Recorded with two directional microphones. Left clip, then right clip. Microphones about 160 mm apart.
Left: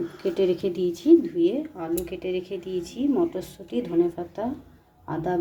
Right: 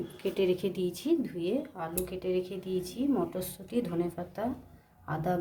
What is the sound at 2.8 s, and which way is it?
Speech, 40° right (ahead or behind).